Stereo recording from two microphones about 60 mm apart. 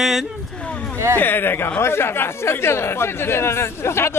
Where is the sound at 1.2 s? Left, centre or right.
Left.